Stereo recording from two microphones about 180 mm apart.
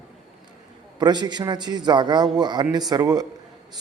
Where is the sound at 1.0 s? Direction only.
25° right (ahead or behind).